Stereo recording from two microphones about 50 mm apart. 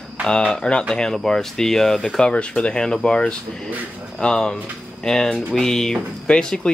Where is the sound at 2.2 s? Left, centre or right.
Left.